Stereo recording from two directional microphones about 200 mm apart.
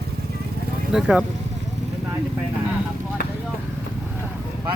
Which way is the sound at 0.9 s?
5° right (ahead or behind).